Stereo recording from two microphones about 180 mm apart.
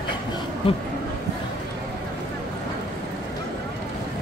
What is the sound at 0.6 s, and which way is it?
Speech, 30° left (ahead or behind).